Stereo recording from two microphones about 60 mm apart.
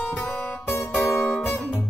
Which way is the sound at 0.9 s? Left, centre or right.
Centre.